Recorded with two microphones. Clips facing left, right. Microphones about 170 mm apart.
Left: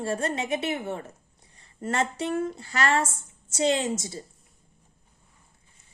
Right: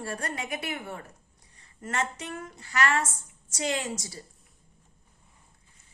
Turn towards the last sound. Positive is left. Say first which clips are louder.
# left 5 dB
turn(degrees=25)  # may be behind; listen again after turning